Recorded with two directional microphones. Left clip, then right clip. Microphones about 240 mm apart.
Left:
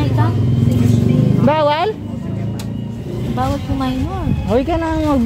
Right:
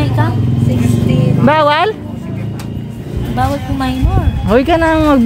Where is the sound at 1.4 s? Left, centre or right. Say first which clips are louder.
Right 5 dB; centre.